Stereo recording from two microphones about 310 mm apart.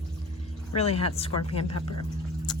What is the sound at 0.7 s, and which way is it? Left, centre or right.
Speech, centre.